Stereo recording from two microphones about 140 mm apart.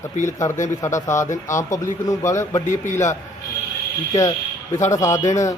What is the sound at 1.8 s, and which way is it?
Speech, 20° left (ahead or behind).